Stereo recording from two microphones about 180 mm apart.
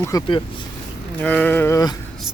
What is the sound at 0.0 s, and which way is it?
Speech, 20° left (ahead or behind).